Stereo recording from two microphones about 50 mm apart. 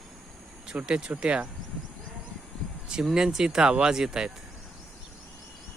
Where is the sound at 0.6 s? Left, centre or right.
Centre.